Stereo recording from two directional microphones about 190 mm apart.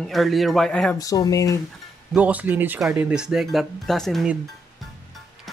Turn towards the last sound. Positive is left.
turn(degrees=0)  # may be behind; listen again after turning